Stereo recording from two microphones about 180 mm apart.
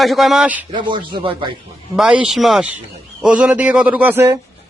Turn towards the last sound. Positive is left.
turn(degrees=-15)  # may be behind; listen again after turning